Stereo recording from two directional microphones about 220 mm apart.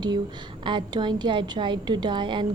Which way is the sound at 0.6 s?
20° right (ahead or behind).